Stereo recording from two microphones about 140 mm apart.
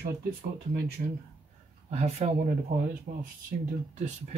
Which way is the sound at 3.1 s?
75° right (ahead or behind).